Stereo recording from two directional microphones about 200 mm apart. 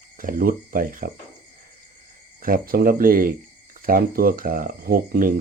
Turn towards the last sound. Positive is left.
turn(degrees=-45)  # may be behind; listen again after turning